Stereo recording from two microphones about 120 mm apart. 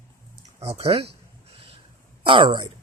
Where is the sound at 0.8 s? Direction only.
55° right (ahead or behind).